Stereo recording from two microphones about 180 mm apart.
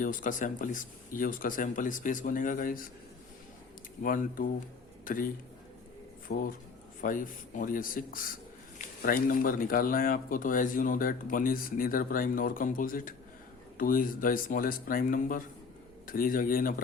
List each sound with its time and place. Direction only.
0.0 s speech: 50° left (ahead or behind)
4.0 s speech: 50° left (ahead or behind)
6.2 s speech: 50° left (ahead or behind)